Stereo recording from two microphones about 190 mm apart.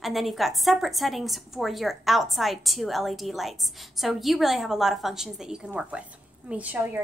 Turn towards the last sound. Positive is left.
turn(degrees=-10)  # may be behind; listen again after turning